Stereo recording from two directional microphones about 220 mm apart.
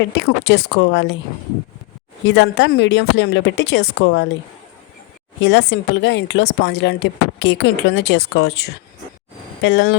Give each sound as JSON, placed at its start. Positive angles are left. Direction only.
{"t": 0.2, "sound": "speech", "side_deg": 55}
{"t": 2.2, "sound": "speech", "side_deg": 55}
{"t": 5.4, "sound": "speech", "side_deg": 55}
{"t": 9.6, "sound": "speech", "side_deg": 55}